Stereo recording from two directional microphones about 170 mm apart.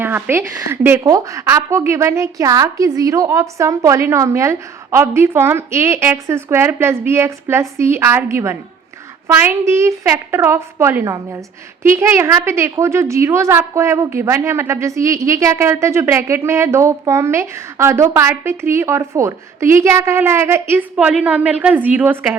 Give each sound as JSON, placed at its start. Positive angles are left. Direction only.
{"t": 0.0, "sound": "a woman's voice", "side_deg": -15}